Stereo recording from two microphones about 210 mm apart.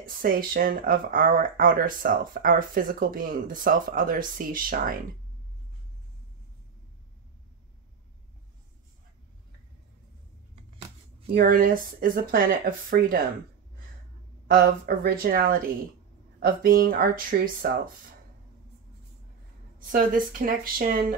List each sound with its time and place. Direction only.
0.0 s speech: 40° right (ahead or behind)
11.2 s speech: 45° right (ahead or behind)
14.5 s speech: 45° right (ahead or behind)
19.9 s speech: 40° right (ahead or behind)